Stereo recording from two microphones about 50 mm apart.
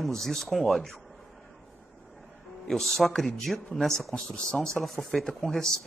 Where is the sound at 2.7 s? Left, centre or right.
Centre.